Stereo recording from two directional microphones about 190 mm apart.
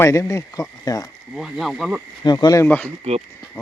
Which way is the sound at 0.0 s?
15° left (ahead or behind).